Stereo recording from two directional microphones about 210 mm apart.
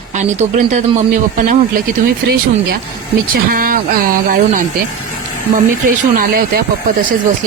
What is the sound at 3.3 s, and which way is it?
Speech, 40° right (ahead or behind).